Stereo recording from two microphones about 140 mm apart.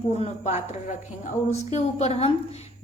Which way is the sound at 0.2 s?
55° left (ahead or behind).